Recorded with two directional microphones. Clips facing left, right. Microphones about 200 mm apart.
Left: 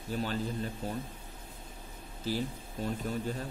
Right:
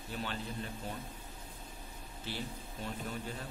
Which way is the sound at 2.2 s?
40° left (ahead or behind).